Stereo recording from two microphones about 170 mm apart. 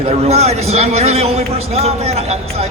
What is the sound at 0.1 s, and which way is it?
A man's voice, 40° right (ahead or behind).